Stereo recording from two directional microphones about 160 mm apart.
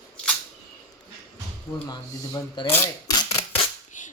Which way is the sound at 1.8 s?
25° left (ahead or behind).